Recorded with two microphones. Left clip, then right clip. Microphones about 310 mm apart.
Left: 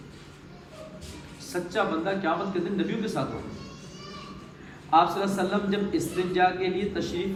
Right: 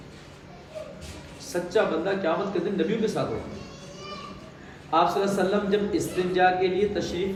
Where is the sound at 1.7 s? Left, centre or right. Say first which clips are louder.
Right 3 dB; centre.